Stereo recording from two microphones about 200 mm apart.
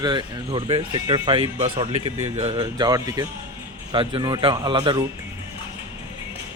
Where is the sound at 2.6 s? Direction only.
20° right (ahead or behind).